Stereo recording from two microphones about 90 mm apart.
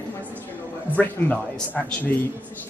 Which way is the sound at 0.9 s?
15° left (ahead or behind).